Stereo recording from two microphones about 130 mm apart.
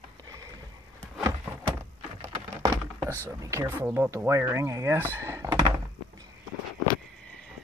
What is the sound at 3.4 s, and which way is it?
Speech, 20° right (ahead or behind).